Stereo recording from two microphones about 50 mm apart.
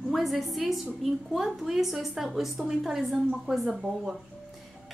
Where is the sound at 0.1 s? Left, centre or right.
Centre.